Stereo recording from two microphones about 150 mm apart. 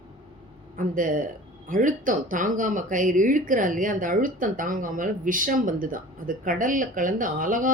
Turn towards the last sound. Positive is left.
turn(degrees=-65)  # may be behind; listen again after turning